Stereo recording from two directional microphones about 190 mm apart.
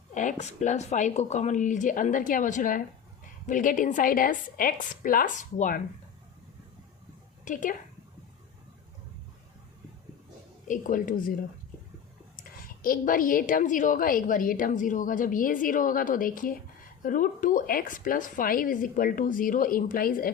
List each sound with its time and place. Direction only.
0.1 s a woman's voice: 40° left (ahead or behind)
7.4 s a woman's voice: 45° left (ahead or behind)
10.7 s a woman's voice: 45° left (ahead or behind)
12.4 s a woman's voice: 50° left (ahead or behind)